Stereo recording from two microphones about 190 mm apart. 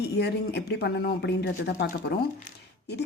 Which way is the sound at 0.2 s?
60° left (ahead or behind).